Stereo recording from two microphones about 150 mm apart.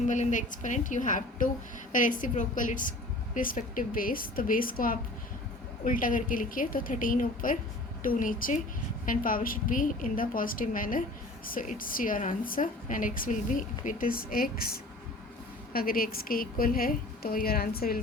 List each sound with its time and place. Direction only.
0.1 s a woman's voice: 55° left (ahead or behind); by 18.0 s 85° left